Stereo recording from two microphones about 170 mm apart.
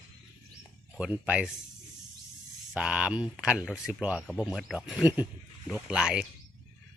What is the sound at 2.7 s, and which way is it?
Speech, 5° right (ahead or behind).